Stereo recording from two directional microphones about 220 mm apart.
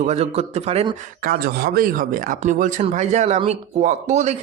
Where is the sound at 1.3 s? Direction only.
45° right (ahead or behind).